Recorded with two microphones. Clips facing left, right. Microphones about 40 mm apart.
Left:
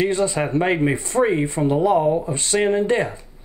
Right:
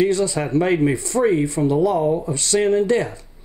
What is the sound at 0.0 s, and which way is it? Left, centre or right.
Speech, left.